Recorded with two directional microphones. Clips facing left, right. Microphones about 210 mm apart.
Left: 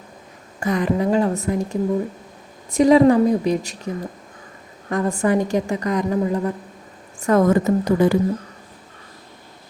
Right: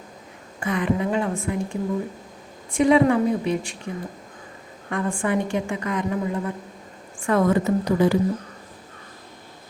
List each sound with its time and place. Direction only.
0.6 s a woman's voice: 40° left (ahead or behind)